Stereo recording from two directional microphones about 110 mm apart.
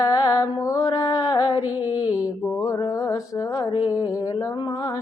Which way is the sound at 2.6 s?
30° left (ahead or behind).